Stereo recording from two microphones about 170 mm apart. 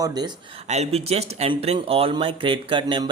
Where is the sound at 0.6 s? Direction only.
40° right (ahead or behind).